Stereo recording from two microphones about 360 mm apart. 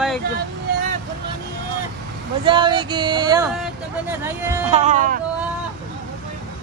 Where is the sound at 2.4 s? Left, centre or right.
Centre.